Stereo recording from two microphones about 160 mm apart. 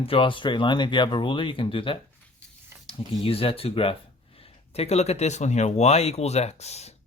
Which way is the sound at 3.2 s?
35° left (ahead or behind).